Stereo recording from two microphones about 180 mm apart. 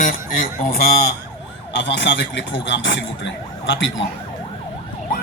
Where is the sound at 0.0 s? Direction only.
50° left (ahead or behind).